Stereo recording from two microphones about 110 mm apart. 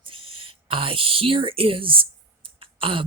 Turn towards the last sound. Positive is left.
turn(degrees=-55)  # may be behind; listen again after turning